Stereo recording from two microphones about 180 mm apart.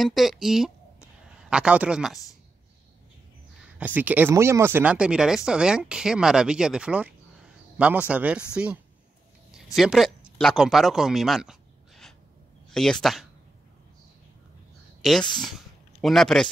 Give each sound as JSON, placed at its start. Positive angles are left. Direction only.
{"t": 0.0, "sound": "speech", "side_deg": 0}
{"t": 3.7, "sound": "speech", "side_deg": -10}
{"t": 9.8, "sound": "speech", "side_deg": 0}
{"t": 12.7, "sound": "speech", "side_deg": 5}
{"t": 15.0, "sound": "speech", "side_deg": 0}